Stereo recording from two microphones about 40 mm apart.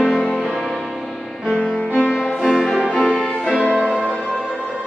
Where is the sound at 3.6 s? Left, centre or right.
Left.